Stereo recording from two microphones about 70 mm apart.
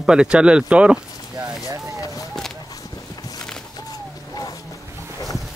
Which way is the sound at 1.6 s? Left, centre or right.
Right.